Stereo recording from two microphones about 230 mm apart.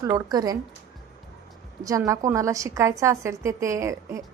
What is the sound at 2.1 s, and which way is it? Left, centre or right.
A woman's voice, centre.